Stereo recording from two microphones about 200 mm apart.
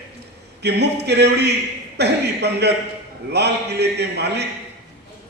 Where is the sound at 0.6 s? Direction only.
55° right (ahead or behind).